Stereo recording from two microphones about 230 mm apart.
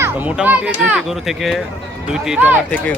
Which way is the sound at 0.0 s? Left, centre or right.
Centre.